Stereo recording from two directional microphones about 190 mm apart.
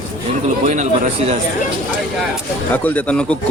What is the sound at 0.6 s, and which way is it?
Speech, 40° right (ahead or behind).